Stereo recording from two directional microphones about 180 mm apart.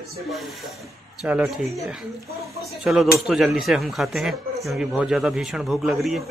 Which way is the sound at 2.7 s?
Centre (ahead or behind).